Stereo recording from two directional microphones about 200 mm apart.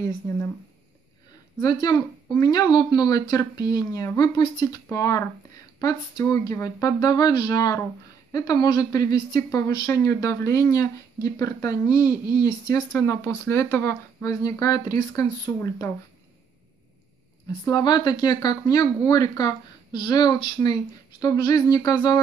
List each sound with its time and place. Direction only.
1.6 s speech: 20° left (ahead or behind)
17.5 s speech: 20° left (ahead or behind)